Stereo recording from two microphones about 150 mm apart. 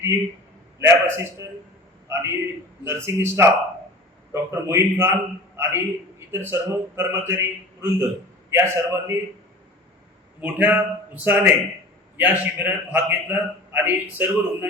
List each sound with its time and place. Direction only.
0.8 s a man's voice: 15° right (ahead or behind)
10.4 s a man's voice: 10° right (ahead or behind)